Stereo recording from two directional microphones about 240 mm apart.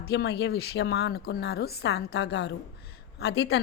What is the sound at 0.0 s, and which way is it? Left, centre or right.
Speech, left.